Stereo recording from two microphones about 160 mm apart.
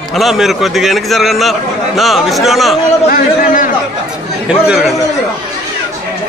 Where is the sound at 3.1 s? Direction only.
60° left (ahead or behind).